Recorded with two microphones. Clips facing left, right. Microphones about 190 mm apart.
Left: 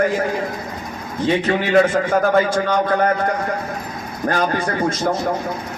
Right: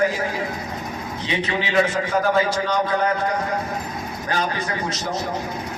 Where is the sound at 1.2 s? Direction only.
50° left (ahead or behind).